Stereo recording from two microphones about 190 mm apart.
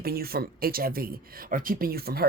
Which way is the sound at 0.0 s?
55° right (ahead or behind).